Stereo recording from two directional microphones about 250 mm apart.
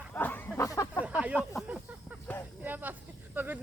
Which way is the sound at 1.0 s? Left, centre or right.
Centre.